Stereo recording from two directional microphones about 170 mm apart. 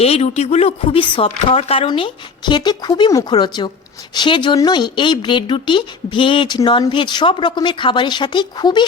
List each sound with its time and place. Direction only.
0.0 s speech: 35° left (ahead or behind)